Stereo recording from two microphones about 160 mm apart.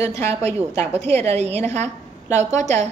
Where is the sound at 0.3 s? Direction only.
40° right (ahead or behind).